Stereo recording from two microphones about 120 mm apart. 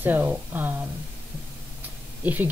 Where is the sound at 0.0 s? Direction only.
15° right (ahead or behind).